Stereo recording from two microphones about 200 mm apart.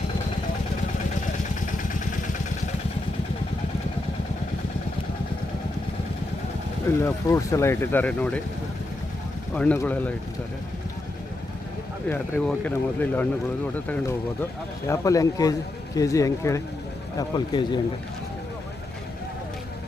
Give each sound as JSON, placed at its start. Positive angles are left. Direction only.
{"t": 7.0, "sound": "speech", "side_deg": 15}
{"t": 9.6, "sound": "speech", "side_deg": 5}
{"t": 12.0, "sound": "speech", "side_deg": 5}